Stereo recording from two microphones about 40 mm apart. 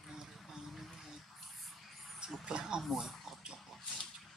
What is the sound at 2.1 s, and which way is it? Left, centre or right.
Speech, centre.